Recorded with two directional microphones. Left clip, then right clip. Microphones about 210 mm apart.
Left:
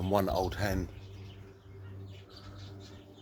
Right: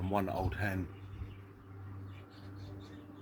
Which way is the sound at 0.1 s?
55° left (ahead or behind).